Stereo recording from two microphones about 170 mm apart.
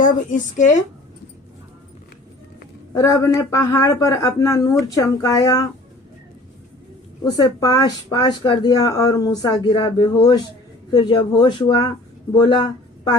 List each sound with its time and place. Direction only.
0.0 s a woman's voice: 50° left (ahead or behind)
2.9 s speech: 20° left (ahead or behind)
7.3 s speech: 20° left (ahead or behind)